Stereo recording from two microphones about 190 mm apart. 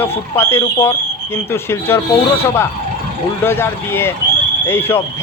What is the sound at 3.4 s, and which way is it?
Speech, 10° left (ahead or behind).